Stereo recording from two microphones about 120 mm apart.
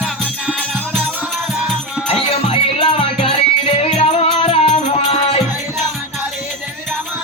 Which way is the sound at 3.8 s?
65° left (ahead or behind).